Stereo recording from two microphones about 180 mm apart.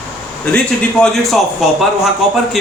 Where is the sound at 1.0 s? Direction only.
Centre (ahead or behind).